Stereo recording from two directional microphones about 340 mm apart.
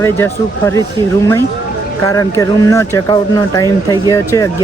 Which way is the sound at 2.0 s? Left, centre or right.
Centre.